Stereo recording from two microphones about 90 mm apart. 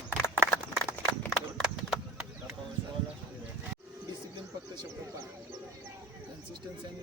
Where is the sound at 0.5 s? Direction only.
25° left (ahead or behind).